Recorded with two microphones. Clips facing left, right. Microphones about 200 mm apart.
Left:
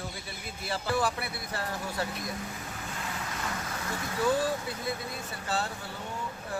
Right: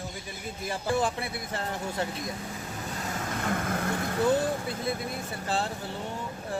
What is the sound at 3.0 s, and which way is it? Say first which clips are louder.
Vehicle: right 5 dB; 45° right (ahead or behind).